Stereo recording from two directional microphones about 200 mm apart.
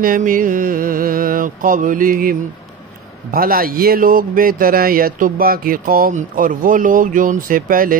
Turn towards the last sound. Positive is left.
turn(degrees=-45)  # may be behind; listen again after turning